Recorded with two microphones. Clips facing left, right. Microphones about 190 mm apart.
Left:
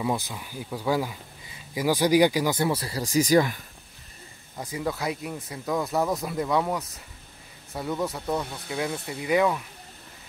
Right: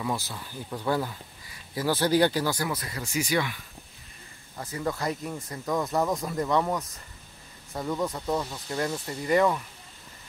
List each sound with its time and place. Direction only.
0.0 s speech: 20° left (ahead or behind); by 3.6 s 40° left (ahead or behind)
4.6 s speech: 10° left (ahead or behind)